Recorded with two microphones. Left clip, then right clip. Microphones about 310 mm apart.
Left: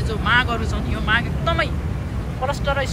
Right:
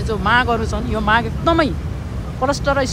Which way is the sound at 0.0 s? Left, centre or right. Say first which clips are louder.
Right 3 dB; centre.